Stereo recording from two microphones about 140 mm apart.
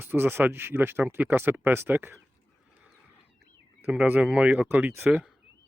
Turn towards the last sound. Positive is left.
turn(degrees=-15)  # may be behind; listen again after turning